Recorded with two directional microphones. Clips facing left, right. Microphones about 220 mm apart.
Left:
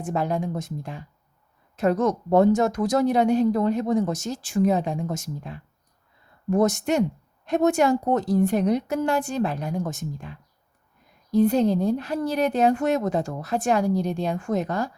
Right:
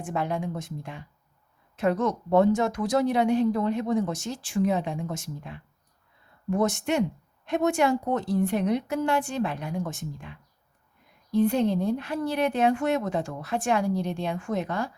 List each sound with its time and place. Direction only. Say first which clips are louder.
0.0 s speech: left 3 dB; 40° left (ahead or behind)